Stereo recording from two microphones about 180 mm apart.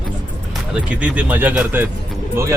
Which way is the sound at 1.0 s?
5° right (ahead or behind).